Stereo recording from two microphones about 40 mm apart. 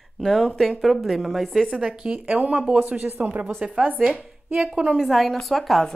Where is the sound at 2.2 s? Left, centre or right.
Right.